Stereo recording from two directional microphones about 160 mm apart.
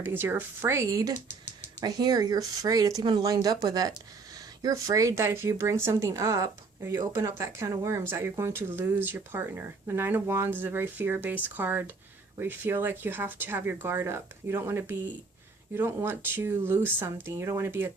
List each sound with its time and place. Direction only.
0.0 s speech: 15° right (ahead or behind)
1.1 s a sound: 45° left (ahead or behind)
1.8 s speech: 25° right (ahead or behind)